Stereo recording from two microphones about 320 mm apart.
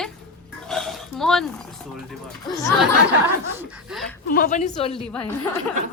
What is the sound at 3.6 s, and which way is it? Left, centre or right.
Speech, centre.